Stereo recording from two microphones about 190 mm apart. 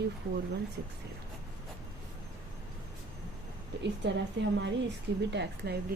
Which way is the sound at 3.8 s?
70° right (ahead or behind).